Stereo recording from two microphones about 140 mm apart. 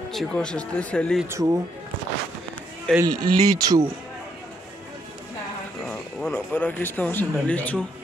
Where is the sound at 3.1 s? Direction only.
25° right (ahead or behind).